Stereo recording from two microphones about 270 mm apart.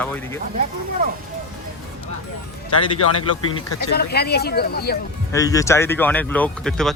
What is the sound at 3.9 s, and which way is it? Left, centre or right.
Speech, left.